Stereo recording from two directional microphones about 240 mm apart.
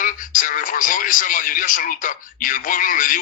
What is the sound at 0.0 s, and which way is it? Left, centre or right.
Speech, left.